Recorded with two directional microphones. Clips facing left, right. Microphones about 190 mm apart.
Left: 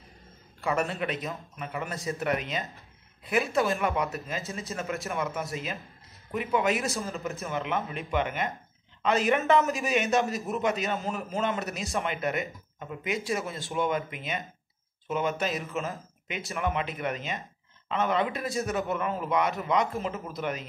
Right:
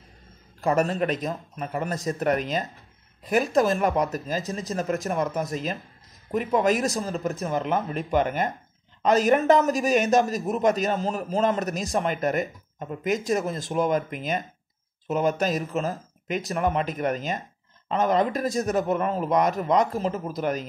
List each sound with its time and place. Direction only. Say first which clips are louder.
0.6 s speech: right 6 dB; 40° right (ahead or behind)